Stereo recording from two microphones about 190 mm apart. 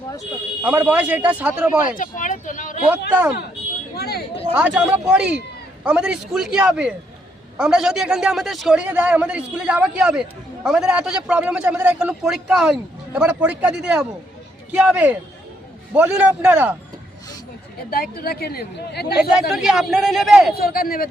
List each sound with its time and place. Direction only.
0.2 s speech: 10° right (ahead or behind)
2.0 s speech: 45° left (ahead or behind)
3.1 s speech: 5° right (ahead or behind)
3.9 s speech: 55° left (ahead or behind)
4.5 s a man's voice: 5° right (ahead or behind)
17.9 s speech: 55° left (ahead or behind)
19.5 s a man's voice: centre (ahead or behind)
20.5 s speech: 50° left (ahead or behind)